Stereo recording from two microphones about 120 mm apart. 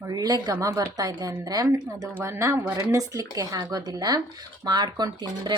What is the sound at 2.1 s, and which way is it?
Speech, 20° right (ahead or behind).